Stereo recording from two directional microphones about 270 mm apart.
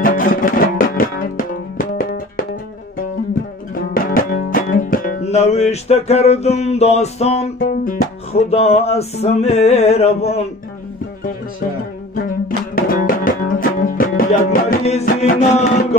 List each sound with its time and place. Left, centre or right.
0.0 s music: left
3.7 s music: left
12.2 s music: left